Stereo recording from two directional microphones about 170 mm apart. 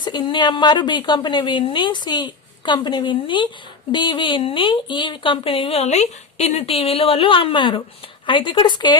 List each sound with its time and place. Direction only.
0.0 s a woman's voice: 25° left (ahead or behind)